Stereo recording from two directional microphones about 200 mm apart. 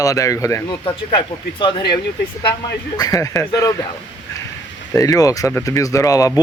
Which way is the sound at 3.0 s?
15° left (ahead or behind).